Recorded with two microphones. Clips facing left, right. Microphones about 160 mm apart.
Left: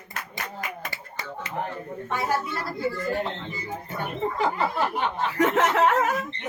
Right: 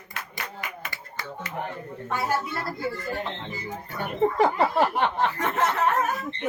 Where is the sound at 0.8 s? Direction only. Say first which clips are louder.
Left 1 dB; 25° left (ahead or behind).